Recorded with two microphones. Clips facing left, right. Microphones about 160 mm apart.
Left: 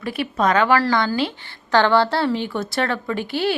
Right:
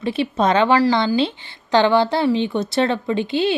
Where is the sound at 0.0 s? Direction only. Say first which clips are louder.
Right 2 dB; 25° right (ahead or behind).